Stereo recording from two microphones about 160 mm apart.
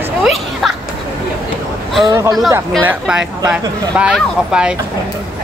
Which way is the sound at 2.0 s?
25° right (ahead or behind).